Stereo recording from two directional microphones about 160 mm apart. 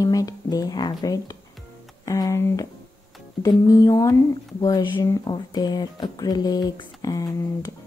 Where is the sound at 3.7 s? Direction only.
20° left (ahead or behind).